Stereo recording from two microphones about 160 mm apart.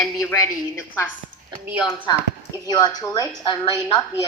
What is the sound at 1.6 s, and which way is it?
Speech, 10° right (ahead or behind).